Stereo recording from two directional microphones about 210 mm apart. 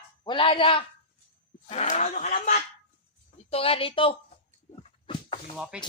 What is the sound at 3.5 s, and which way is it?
Speech, 25° left (ahead or behind).